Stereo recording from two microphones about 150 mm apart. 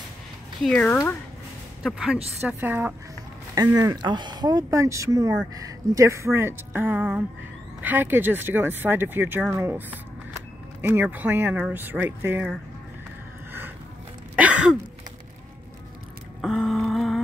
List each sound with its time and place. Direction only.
0.6 s speech: centre (ahead or behind)
2.4 s speech: 15° right (ahead or behind)
3.5 s speech: 25° right (ahead or behind)
14.3 s throat clearing: 10° right (ahead or behind)
16.3 s a sound: centre (ahead or behind)